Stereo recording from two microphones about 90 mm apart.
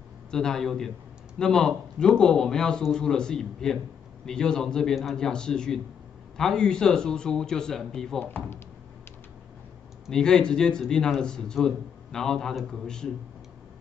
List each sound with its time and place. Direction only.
0.3 s a man's voice: 5° left (ahead or behind)
8.2 s speech: 20° left (ahead or behind)
10.0 s a man's voice: 5° left (ahead or behind)